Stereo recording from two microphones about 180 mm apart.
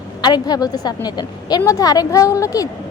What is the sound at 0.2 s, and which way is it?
A woman's voice, 25° left (ahead or behind).